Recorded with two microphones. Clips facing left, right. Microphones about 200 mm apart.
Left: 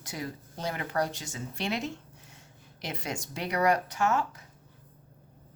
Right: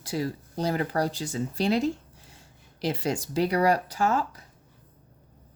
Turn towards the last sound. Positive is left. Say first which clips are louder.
# right 2 dB
turn(degrees=-35)  # may be behind; listen again after turning